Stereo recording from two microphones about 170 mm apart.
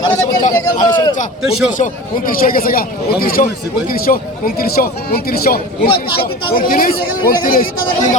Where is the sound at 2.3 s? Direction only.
55° left (ahead or behind).